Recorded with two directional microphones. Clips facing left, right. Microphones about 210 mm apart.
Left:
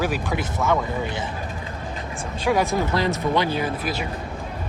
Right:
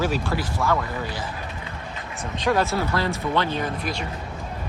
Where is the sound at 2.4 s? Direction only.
15° left (ahead or behind).